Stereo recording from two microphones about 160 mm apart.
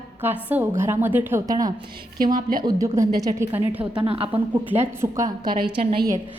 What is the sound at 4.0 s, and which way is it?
Speech, 35° right (ahead or behind).